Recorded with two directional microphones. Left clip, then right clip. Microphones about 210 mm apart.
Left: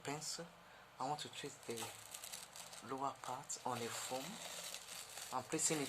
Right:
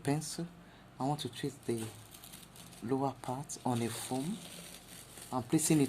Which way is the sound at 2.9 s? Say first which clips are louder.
Right 8 dB; 40° right (ahead or behind).